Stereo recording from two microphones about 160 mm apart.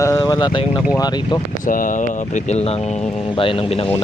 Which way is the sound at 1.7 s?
55° left (ahead or behind).